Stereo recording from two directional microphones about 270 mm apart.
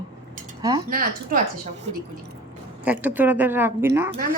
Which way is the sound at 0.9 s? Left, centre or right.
Right.